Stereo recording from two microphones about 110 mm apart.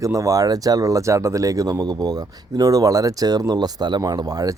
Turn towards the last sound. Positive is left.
turn(degrees=-35)  # may be behind; listen again after turning